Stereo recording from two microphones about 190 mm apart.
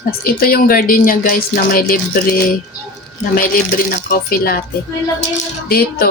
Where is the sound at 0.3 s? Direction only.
50° left (ahead or behind).